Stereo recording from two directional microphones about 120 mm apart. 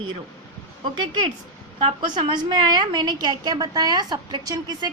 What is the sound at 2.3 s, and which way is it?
A woman's voice, 35° right (ahead or behind).